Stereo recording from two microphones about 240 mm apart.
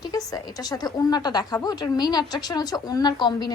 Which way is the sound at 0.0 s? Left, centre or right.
Centre.